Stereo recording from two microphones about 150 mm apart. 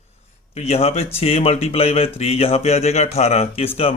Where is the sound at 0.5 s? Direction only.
40° left (ahead or behind).